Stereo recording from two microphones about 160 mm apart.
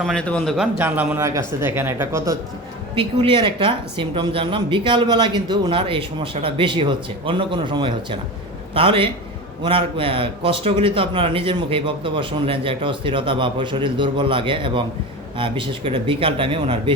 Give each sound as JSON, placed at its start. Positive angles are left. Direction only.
{"t": 0.0, "sound": "a man's voice", "side_deg": 5}
{"t": 0.8, "sound": "speech", "side_deg": -10}
{"t": 2.9, "sound": "a woman's voice", "side_deg": -35}